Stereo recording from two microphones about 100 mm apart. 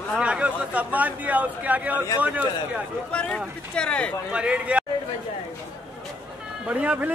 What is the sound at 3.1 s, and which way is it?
Speech, 10° left (ahead or behind).